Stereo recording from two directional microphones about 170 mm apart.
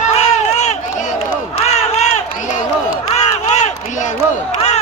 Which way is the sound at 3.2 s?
40° left (ahead or behind).